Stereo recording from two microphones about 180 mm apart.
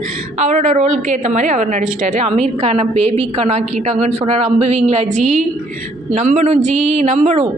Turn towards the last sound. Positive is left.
turn(degrees=-35)  # may be behind; listen again after turning